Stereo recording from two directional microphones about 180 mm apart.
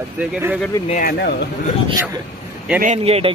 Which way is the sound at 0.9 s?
55° left (ahead or behind).